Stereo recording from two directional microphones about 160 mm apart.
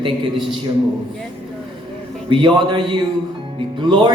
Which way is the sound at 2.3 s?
30° right (ahead or behind).